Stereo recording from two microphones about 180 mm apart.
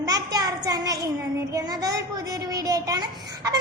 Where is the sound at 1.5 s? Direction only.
20° right (ahead or behind).